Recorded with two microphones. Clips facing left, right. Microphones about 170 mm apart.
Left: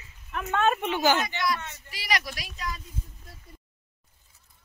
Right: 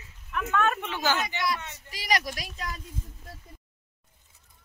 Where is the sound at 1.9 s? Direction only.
40° right (ahead or behind).